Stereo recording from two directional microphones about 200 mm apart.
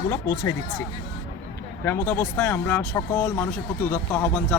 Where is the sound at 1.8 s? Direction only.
10° left (ahead or behind).